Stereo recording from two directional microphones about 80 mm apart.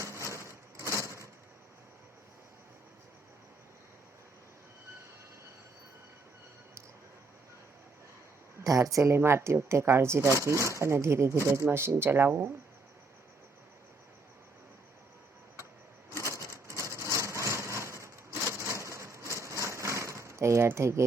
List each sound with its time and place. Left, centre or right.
0.3 s a sound: right
8.6 s speech: right
16.3 s sewing machine: right